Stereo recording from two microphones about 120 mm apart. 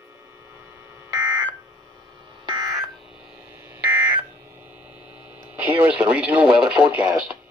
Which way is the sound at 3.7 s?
15° right (ahead or behind).